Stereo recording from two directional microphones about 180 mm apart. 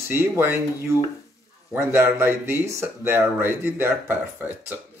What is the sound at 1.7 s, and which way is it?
Speech, 15° right (ahead or behind).